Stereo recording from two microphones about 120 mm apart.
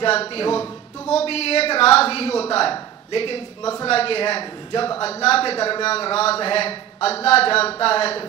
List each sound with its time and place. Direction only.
0.0 s speech: 55° left (ahead or behind)
5.0 s speech: 55° left (ahead or behind)